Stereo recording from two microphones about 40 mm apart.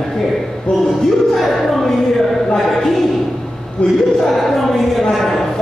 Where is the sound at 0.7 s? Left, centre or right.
Left.